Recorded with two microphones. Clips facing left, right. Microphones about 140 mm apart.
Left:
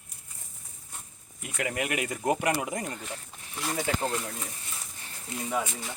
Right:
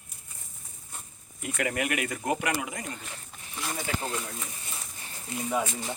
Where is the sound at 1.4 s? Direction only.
20° left (ahead or behind); by 2.8 s 40° left (ahead or behind).